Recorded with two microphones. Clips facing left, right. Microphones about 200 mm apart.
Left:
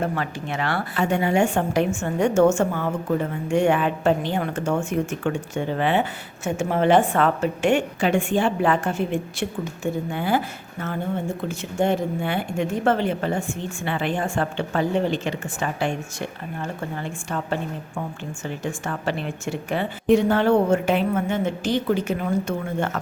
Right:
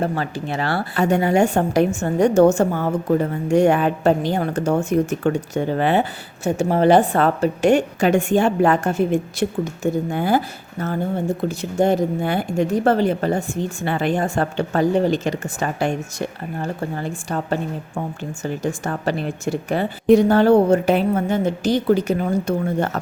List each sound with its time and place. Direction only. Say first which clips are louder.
0.0 s a woman's voice: right 3 dB; 35° right (ahead or behind)